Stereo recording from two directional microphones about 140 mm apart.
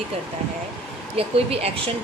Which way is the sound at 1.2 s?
45° right (ahead or behind).